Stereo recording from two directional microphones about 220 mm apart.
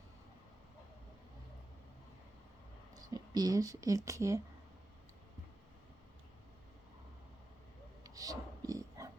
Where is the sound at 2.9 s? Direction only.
15° right (ahead or behind).